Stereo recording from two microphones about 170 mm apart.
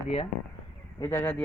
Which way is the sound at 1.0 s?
15° left (ahead or behind).